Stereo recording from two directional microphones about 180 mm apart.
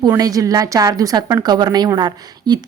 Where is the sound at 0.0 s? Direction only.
20° right (ahead or behind).